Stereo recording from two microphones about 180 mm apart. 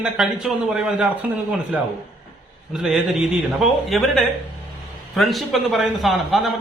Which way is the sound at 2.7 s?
Centre (ahead or behind).